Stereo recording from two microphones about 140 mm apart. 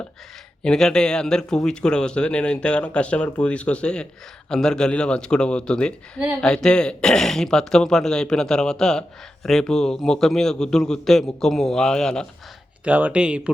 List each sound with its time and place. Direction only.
0.6 s speech: 5° left (ahead or behind)
12.8 s speech: 10° right (ahead or behind)